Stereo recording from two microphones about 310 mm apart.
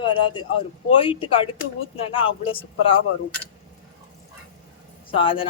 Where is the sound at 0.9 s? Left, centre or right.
Centre.